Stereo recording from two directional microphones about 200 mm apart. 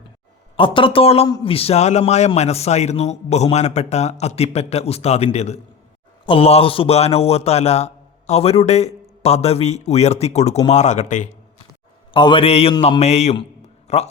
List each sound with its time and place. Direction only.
0.5 s a man's voice: 25° left (ahead or behind)
12.1 s a man's voice: 25° left (ahead or behind)